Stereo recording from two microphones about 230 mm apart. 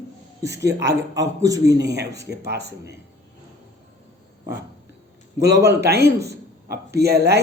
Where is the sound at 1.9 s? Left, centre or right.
Right.